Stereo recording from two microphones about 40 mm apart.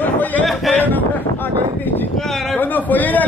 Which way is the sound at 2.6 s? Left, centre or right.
Left.